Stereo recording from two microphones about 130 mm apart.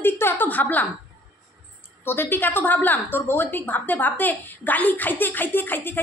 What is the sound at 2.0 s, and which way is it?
A woman's voice, 15° left (ahead or behind).